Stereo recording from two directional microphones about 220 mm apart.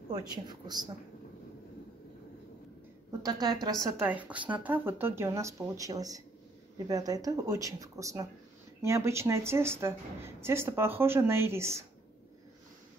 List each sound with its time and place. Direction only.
0.1 s speech: 20° right (ahead or behind)
3.1 s a woman's voice: 15° right (ahead or behind)
3.9 s a woman's voice: 5° right (ahead or behind)